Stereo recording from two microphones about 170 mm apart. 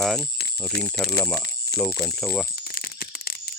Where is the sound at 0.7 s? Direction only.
70° left (ahead or behind).